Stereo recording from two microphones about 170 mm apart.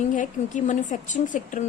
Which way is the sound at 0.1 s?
45° left (ahead or behind).